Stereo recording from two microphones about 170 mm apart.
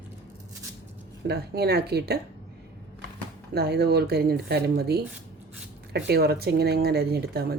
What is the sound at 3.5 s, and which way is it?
Speech, 70° right (ahead or behind).